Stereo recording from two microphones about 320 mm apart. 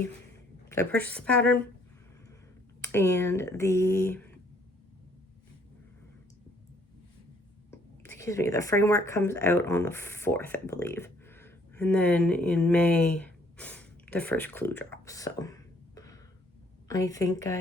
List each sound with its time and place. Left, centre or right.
0.7 s a woman's voice: centre
2.8 s speech: centre
7.7 s speech: centre